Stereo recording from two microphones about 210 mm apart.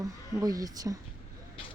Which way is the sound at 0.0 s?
15° right (ahead or behind).